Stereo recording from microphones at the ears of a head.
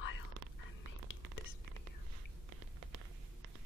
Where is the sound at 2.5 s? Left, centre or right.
Right.